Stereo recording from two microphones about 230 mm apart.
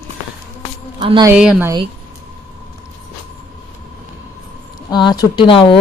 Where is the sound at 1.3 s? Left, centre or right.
Centre.